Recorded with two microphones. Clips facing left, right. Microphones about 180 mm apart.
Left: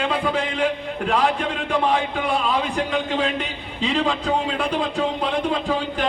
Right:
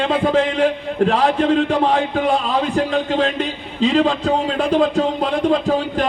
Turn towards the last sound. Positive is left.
turn(degrees=-40)  # may be behind; listen again after turning